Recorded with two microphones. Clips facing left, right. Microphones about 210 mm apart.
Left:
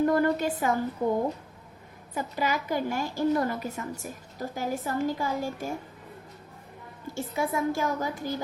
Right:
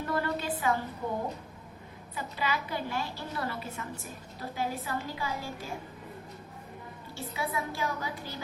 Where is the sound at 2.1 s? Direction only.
45° left (ahead or behind).